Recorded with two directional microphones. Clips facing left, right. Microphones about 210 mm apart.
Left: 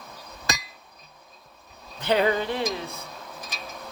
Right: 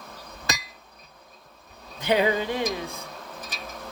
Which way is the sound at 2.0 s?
15° right (ahead or behind).